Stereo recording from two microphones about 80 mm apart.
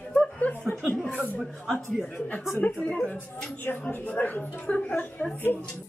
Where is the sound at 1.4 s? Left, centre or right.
Centre.